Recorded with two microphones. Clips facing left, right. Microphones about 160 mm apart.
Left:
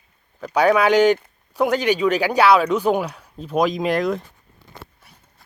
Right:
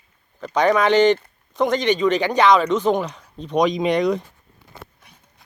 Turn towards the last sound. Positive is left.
turn(degrees=5)  # may be behind; listen again after turning